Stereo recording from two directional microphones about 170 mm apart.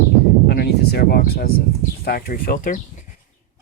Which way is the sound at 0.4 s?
70° left (ahead or behind).